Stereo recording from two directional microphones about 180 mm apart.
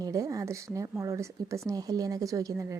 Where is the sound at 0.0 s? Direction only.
20° right (ahead or behind).